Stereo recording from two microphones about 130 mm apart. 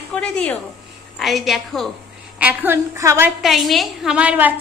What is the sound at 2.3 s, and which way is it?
Speech, 15° right (ahead or behind).